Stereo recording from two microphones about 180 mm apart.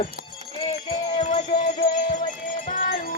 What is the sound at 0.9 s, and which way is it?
Music, 40° left (ahead or behind).